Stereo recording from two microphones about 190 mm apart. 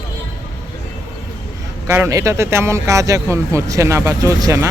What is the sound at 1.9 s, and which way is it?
Speech, 15° right (ahead or behind).